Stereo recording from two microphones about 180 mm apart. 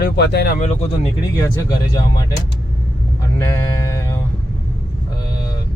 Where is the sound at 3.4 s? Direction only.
15° left (ahead or behind).